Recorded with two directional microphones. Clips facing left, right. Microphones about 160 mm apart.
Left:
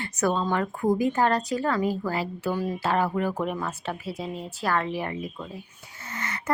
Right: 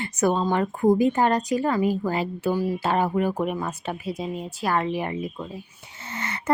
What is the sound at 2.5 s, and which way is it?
Speech, 5° right (ahead or behind).